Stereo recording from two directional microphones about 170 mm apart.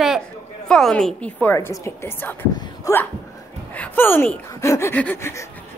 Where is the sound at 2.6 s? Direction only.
15° left (ahead or behind).